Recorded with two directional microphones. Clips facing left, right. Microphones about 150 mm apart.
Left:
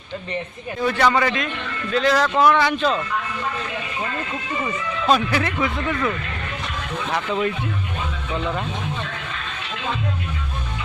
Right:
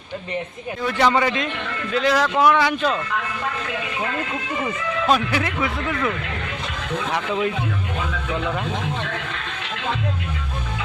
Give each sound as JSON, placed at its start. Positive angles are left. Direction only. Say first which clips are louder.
{"t": 0.9, "sound": "a man's voice", "louder": "right 2 dB", "side_deg": -20}
{"t": 4.6, "sound": "speech", "louder": "right 1 dB", "side_deg": -5}